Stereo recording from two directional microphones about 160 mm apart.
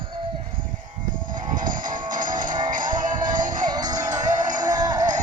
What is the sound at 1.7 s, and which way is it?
Music, 55° right (ahead or behind).